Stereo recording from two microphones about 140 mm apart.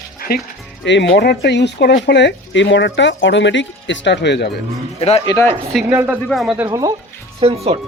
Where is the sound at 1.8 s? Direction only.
90° left.